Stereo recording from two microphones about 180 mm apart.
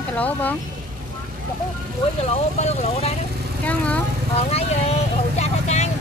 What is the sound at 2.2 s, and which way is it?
Speech, 35° left (ahead or behind).